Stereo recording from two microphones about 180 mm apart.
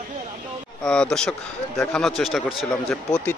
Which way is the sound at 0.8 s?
5° left (ahead or behind).